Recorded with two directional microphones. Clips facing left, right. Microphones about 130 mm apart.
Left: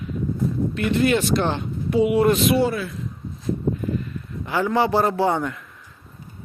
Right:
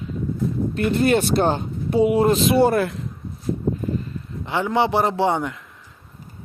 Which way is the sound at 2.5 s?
55° right (ahead or behind).